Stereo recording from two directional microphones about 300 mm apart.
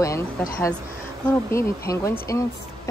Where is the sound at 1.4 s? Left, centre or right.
Centre.